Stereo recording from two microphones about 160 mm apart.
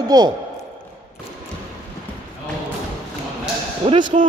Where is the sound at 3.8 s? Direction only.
30° right (ahead or behind).